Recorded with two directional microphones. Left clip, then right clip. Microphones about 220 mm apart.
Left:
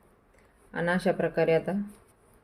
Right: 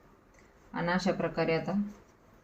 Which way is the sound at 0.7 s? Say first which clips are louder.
Left 4 dB; 45° left (ahead or behind).